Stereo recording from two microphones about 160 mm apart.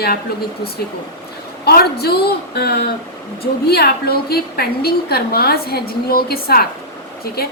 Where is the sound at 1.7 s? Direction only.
80° left.